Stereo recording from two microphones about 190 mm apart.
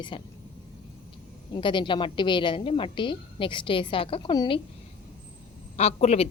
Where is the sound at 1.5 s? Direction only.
25° left (ahead or behind).